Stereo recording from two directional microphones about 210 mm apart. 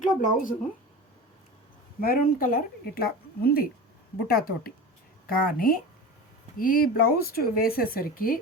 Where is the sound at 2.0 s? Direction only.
45° left (ahead or behind).